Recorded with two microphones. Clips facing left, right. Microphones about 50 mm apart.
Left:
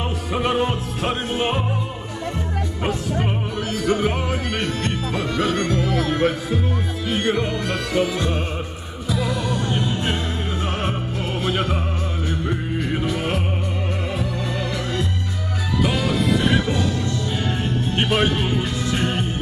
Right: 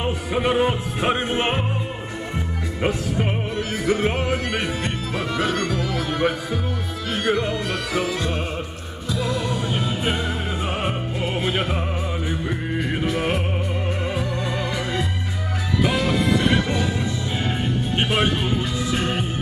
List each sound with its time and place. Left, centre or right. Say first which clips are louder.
0.0 s music: right 1 dB; centre
1.3 s music: even; right
3.7 s music: left 1 dB; centre
11.4 s music: left 1 dB; centre
17.4 s music: even; centre